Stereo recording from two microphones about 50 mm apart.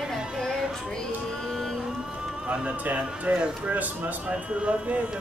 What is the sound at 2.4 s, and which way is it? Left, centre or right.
Speech, right.